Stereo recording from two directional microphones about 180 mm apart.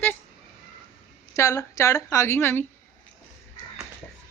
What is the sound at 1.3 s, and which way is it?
A man's voice, 15° left (ahead or behind).